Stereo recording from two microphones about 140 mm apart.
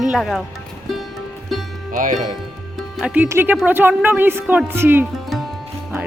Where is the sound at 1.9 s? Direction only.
75° right (ahead or behind).